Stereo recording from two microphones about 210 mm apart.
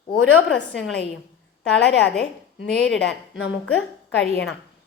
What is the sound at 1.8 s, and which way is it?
A woman's voice, 55° left (ahead or behind).